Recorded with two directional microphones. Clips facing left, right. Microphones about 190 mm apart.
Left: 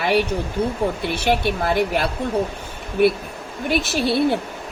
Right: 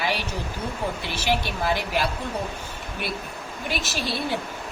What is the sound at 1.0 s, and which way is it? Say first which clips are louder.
Speech: left 5 dB; 60° left (ahead or behind).